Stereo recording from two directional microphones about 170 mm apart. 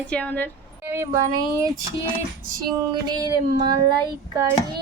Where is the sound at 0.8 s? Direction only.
15° right (ahead or behind).